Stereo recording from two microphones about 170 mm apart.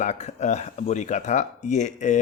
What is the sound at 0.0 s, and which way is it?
Speech, 45° left (ahead or behind).